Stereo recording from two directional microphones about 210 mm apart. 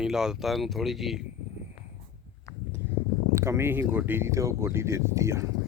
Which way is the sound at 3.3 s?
15° right (ahead or behind).